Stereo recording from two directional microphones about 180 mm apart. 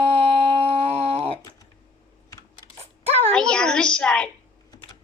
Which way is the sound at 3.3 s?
5° left (ahead or behind).